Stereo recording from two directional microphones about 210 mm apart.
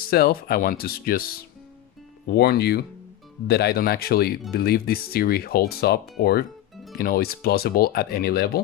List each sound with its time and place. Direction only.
0.1 s speech: 45° left (ahead or behind)
2.2 s speech: 50° left (ahead or behind)